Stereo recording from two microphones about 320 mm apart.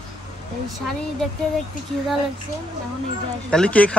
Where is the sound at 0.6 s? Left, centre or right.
Centre.